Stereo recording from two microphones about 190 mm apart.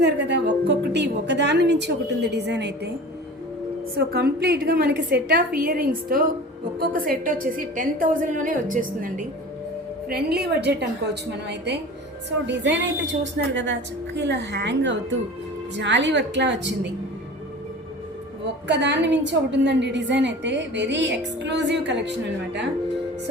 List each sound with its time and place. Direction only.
0.0 s a woman's voice: 65° right (ahead or behind)
3.9 s a woman's voice: 55° right (ahead or behind)
10.1 s a woman's voice: 55° right (ahead or behind)
18.7 s a woman's voice: 65° right (ahead or behind)